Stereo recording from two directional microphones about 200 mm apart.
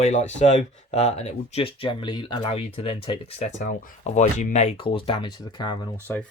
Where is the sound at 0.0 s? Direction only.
35° left (ahead or behind).